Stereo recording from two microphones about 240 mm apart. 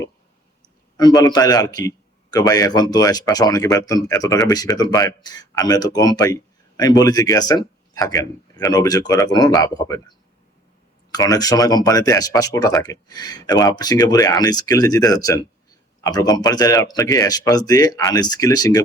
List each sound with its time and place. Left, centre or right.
0.9 s a man's voice: centre
11.1 s a man's voice: centre